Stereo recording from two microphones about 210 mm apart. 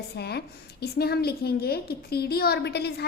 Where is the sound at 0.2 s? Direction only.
50° left (ahead or behind).